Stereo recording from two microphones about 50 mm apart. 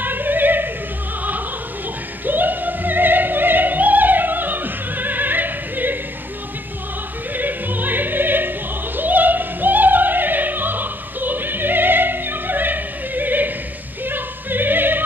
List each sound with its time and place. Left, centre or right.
0.0 s opera: right
2.2 s opera: right
7.3 s opera: right
14.0 s music: right